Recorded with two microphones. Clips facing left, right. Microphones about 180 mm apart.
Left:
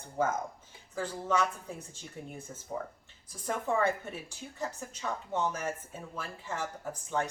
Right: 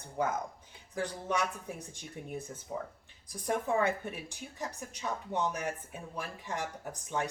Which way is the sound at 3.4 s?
15° right (ahead or behind).